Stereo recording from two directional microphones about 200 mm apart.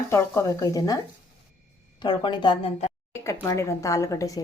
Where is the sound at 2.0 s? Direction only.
20° left (ahead or behind).